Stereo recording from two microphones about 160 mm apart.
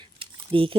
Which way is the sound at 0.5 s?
30° right (ahead or behind).